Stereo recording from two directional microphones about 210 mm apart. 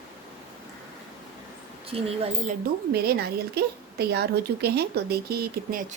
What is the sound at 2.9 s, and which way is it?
A woman's voice, 50° right (ahead or behind).